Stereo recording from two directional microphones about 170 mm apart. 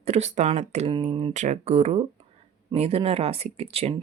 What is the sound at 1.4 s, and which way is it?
Speech, 40° right (ahead or behind).